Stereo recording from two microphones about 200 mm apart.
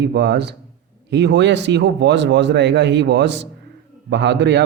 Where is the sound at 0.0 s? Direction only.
55° right (ahead or behind).